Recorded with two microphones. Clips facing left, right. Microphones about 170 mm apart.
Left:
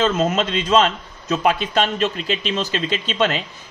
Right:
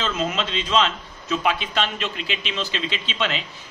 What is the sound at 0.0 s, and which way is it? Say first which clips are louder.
A man's voice: left 7 dB; 45° left (ahead or behind).